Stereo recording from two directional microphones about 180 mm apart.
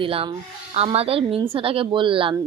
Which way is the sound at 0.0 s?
30° right (ahead or behind).